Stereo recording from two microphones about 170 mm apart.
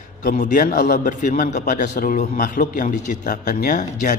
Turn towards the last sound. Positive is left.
turn(degrees=50)  # may be behind; listen again after turning